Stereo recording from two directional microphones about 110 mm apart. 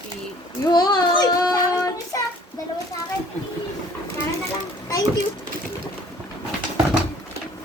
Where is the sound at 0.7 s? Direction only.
40° left (ahead or behind).